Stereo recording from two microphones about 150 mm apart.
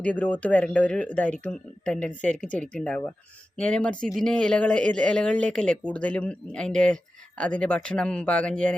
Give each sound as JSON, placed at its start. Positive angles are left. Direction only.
{"t": 0.0, "sound": "speech", "side_deg": 10}